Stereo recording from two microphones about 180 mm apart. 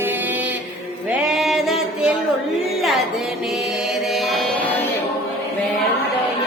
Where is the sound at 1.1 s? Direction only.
Centre (ahead or behind).